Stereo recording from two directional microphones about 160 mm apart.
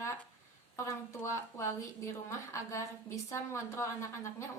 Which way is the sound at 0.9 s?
20° left (ahead or behind).